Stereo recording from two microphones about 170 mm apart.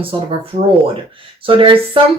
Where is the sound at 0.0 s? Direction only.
30° right (ahead or behind).